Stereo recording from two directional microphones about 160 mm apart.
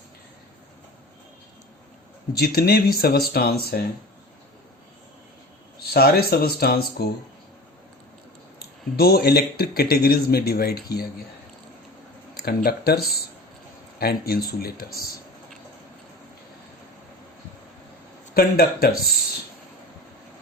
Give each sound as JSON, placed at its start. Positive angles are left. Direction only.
{"t": 2.3, "sound": "speech", "side_deg": 75}
{"t": 5.8, "sound": "speech", "side_deg": 75}
{"t": 8.5, "sound": "speech", "side_deg": 75}
{"t": 12.3, "sound": "speech", "side_deg": 70}
{"t": 18.3, "sound": "speech", "side_deg": 70}